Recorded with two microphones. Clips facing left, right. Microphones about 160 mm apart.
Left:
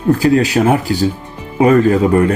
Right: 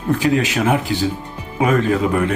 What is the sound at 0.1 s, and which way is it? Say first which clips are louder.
Speech: left 5 dB; 35° left (ahead or behind).